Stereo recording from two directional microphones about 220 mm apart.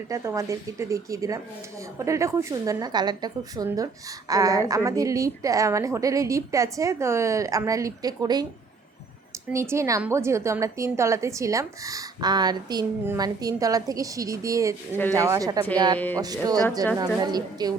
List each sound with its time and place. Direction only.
0.1 s a woman's voice: 15° right (ahead or behind)
9.5 s a woman's voice: 10° right (ahead or behind)
16.0 s speech: 5° left (ahead or behind)
16.2 s a woman's voice: 15° right (ahead or behind)